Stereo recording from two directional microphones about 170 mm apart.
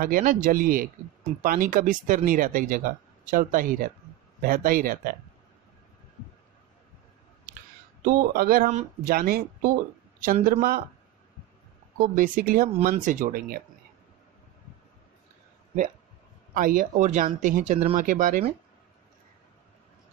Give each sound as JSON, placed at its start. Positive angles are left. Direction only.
{"t": 0.0, "sound": "speech", "side_deg": -55}
{"t": 8.0, "sound": "speech", "side_deg": -55}
{"t": 8.6, "sound": "speech", "side_deg": -50}
{"t": 12.0, "sound": "speech", "side_deg": -55}
{"t": 16.5, "sound": "speech", "side_deg": -55}